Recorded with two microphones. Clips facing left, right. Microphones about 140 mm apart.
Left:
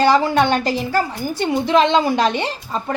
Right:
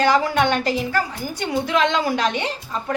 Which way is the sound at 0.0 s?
30° left (ahead or behind).